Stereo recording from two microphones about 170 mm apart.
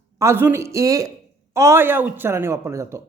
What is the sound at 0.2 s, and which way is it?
Speech, 15° right (ahead or behind).